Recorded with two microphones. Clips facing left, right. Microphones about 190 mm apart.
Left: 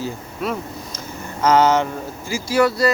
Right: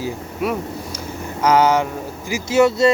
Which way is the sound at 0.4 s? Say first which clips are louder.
Right 3 dB; 10° right (ahead or behind).